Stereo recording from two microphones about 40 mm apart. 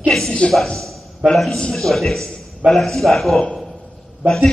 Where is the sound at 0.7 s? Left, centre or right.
Centre.